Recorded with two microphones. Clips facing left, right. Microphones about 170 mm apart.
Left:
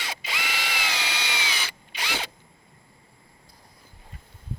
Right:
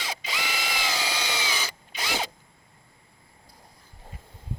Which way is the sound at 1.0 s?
35° right (ahead or behind).